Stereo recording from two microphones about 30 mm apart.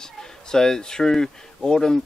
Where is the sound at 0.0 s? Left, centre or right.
Left.